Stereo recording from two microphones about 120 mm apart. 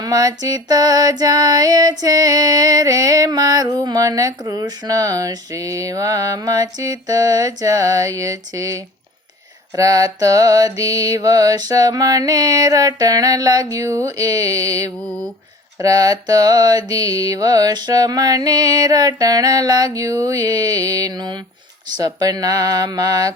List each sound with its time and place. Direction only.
0.0 s female singing: 30° right (ahead or behind)
15.8 s mantra: 30° right (ahead or behind)